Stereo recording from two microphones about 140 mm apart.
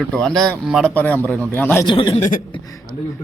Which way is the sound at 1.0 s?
10° left (ahead or behind).